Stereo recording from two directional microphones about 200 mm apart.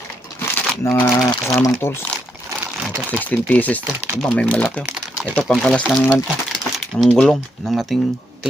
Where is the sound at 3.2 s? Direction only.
10° left (ahead or behind).